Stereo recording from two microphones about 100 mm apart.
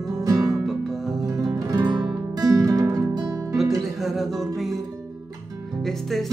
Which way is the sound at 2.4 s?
35° right (ahead or behind).